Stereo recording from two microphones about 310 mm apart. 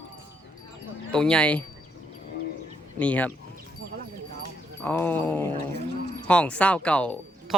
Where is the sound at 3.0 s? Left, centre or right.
Centre.